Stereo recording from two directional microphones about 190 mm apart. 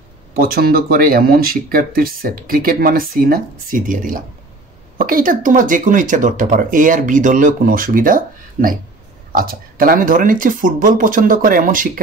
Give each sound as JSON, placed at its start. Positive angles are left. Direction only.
{"t": 0.4, "sound": "speech", "side_deg": -50}